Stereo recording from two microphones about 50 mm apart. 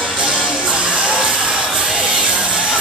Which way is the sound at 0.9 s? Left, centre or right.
Centre.